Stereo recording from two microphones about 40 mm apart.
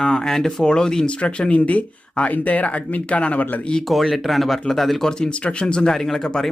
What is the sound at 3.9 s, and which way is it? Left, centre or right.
Speech, centre.